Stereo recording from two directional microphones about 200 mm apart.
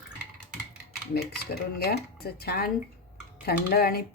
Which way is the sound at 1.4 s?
55° left (ahead or behind).